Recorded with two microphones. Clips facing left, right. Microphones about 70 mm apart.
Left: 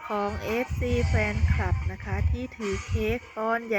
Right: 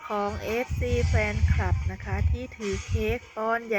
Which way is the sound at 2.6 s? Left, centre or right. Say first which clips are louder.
Even; left.